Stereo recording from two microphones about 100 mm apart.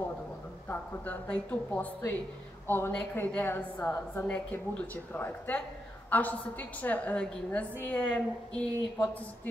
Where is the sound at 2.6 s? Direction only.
20° left (ahead or behind).